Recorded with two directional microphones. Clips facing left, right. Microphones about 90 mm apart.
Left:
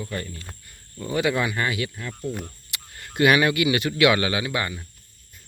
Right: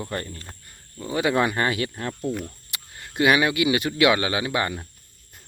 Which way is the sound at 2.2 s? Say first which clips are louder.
Right 2 dB; 50° right (ahead or behind).